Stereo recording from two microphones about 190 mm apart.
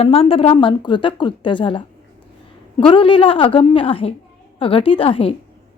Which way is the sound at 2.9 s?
30° left (ahead or behind).